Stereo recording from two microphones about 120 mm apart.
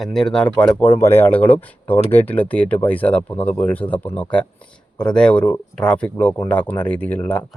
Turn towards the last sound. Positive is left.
turn(degrees=15)  # may be behind; listen again after turning